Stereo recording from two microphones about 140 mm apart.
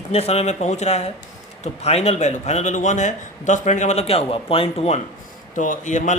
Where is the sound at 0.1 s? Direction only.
45° left (ahead or behind).